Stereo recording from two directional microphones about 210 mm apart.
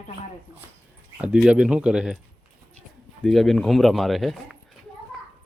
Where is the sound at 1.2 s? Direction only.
5° right (ahead or behind).